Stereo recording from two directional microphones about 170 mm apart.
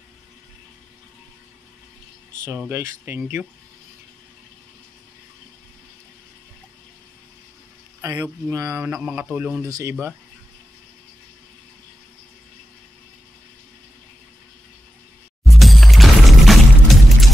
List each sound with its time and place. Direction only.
2.7 s speech: 15° right (ahead or behind)
8.0 s speech: 20° right (ahead or behind)
15.5 s music: centre (ahead or behind)